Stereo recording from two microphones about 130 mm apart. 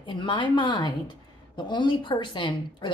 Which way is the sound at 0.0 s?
40° left (ahead or behind).